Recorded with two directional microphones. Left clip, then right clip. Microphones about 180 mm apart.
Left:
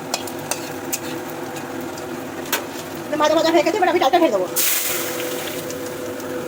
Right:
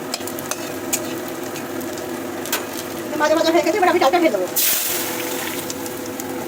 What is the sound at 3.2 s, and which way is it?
Speech, 20° left (ahead or behind).